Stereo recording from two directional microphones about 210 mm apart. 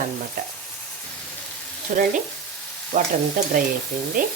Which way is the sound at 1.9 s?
40° right (ahead or behind).